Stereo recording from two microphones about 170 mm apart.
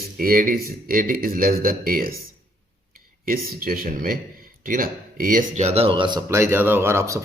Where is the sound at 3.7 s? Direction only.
60° right (ahead or behind); by 7.2 s 15° right (ahead or behind).